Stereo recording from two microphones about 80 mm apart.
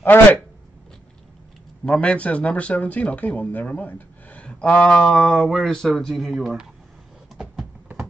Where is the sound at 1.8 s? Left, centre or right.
Centre.